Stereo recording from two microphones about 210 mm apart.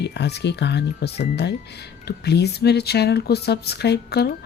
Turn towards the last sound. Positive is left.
turn(degrees=50)  # may be behind; listen again after turning